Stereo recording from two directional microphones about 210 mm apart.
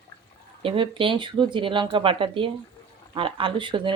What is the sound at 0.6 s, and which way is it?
Speech, 25° right (ahead or behind).